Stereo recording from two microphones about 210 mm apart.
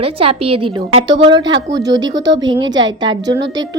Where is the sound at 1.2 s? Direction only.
20° right (ahead or behind).